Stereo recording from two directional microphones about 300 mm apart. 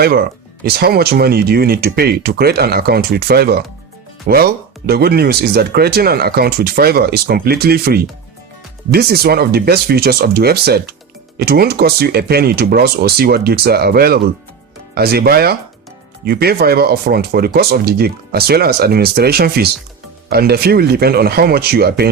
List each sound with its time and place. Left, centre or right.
0.0 s speech: right